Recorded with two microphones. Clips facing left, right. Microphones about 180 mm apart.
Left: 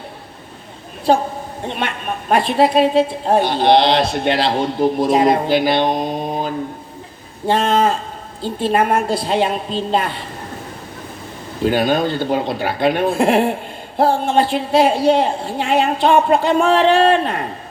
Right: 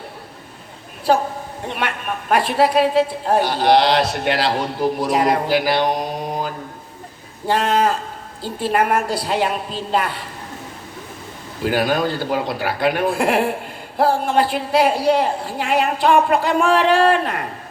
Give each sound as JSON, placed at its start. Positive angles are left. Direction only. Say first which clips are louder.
{"t": 1.1, "sound": "a woman's voice", "louder": "left 2 dB", "side_deg": 25}
{"t": 11.6, "sound": "a woman's voice", "louder": "left 3 dB", "side_deg": 25}